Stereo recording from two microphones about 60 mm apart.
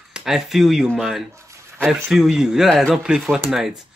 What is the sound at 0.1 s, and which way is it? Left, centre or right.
Speech, centre.